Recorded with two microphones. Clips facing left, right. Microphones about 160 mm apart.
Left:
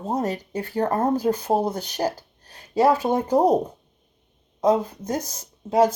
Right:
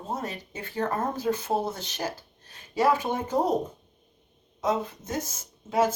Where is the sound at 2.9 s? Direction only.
35° left (ahead or behind).